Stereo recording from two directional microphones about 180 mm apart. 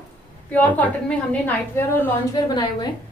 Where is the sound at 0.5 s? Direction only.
10° left (ahead or behind).